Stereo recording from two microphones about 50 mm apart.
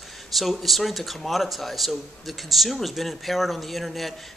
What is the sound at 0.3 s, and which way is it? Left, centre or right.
Speech, centre.